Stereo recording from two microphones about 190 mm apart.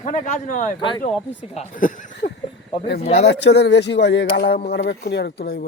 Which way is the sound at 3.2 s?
60° left (ahead or behind).